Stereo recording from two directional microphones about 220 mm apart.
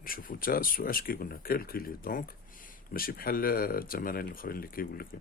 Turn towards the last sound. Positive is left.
turn(degrees=40)  # may be behind; listen again after turning